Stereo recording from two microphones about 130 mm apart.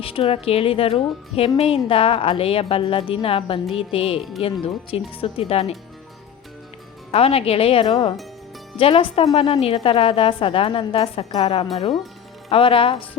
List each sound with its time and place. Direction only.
0.0 s speech: 45° left (ahead or behind)
7.1 s speech: 50° left (ahead or behind)